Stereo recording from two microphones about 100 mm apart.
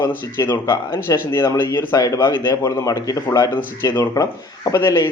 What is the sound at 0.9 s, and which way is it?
Speech, 25° left (ahead or behind).